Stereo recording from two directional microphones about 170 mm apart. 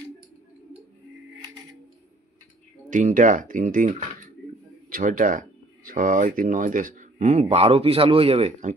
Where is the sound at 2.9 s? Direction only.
50° right (ahead or behind).